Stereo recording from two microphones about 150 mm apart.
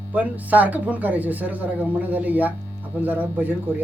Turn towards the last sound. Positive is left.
turn(degrees=-10)  # may be behind; listen again after turning